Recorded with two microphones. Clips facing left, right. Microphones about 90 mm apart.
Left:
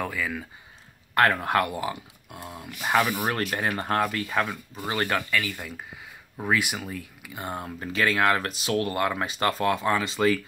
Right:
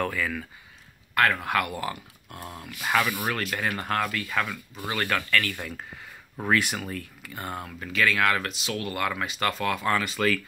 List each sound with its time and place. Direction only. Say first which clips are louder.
0.0 s speech: right 1 dB; 10° left (ahead or behind)
1.1 s speech: left 2 dB; 35° left (ahead or behind)
1.8 s speech: left 2 dB; 15° left (ahead or behind)
5.3 s speech: right 1 dB; 10° left (ahead or behind); by 9.8 s 35° left (ahead or behind)
9.8 s speech: right 1 dB; 20° left (ahead or behind)